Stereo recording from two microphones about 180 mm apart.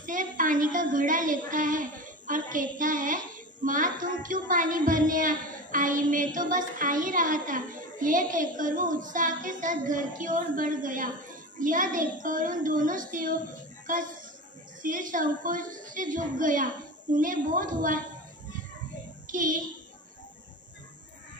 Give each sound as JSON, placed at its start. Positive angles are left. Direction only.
{"t": 0.0, "sound": "a woman's voice", "side_deg": -45}
{"t": 14.8, "sound": "a woman's voice", "side_deg": -45}
{"t": 19.2, "sound": "a child's voice", "side_deg": -50}